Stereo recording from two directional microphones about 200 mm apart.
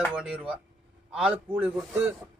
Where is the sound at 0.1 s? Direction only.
5° right (ahead or behind).